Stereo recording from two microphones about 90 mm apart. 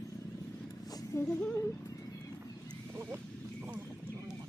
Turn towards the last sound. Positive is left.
turn(degrees=-25)  # may be behind; listen again after turning